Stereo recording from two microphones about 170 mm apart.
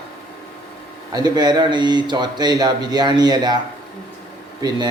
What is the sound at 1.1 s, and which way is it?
Speech, 25° right (ahead or behind).